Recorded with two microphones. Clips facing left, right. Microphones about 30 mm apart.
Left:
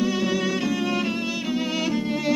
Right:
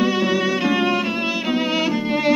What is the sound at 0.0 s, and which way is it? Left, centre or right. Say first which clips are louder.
Music: right 5 dB; right.